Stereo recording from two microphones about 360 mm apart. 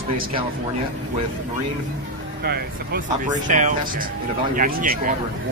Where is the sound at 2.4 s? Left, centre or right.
Right.